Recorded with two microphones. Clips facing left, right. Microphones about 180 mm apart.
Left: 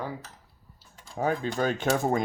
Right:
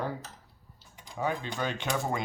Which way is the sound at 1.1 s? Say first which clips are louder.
Left 5 dB; 45° left (ahead or behind).